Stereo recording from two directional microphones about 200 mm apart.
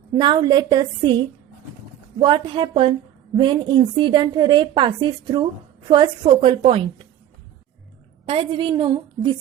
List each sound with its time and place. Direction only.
0.2 s a woman's voice: 25° right (ahead or behind)
2.2 s a woman's voice: 25° right (ahead or behind)
8.3 s a woman's voice: 25° right (ahead or behind)